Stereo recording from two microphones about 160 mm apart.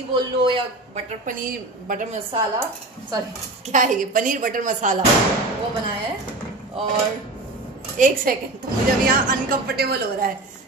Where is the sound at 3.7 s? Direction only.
55° right (ahead or behind).